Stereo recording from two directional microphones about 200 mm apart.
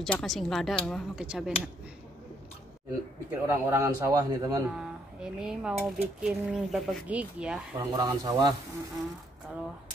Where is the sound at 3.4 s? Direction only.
10° right (ahead or behind).